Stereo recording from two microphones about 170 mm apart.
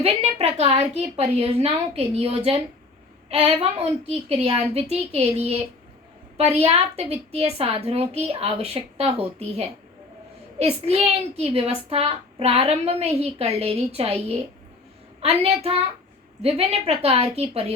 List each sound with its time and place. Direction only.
0.0 s a child's voice: 35° right (ahead or behind)